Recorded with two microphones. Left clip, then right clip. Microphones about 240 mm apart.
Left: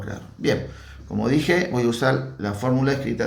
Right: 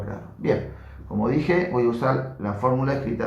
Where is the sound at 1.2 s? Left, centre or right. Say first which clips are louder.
Left 2 dB; left.